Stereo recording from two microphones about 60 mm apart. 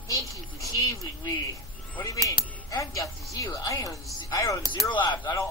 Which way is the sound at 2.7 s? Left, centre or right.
Left.